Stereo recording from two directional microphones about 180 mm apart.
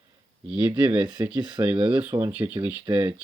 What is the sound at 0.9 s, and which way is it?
Speech, 5° right (ahead or behind).